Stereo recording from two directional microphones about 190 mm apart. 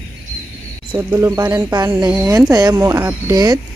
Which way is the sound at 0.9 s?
15° right (ahead or behind).